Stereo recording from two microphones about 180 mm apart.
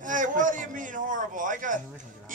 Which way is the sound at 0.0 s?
45° right (ahead or behind).